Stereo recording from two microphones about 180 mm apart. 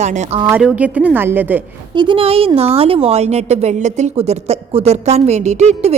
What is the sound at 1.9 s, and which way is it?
A woman's voice, 30° right (ahead or behind).